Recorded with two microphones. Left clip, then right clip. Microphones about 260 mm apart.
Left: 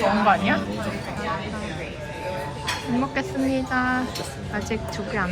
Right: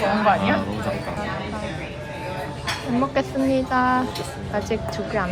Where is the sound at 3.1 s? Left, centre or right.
Centre.